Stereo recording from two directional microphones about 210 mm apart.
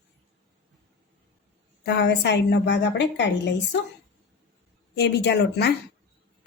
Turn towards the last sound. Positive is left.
turn(degrees=50)  # may be behind; listen again after turning